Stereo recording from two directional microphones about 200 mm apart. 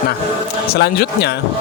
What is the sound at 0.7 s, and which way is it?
Speech, 55° left (ahead or behind).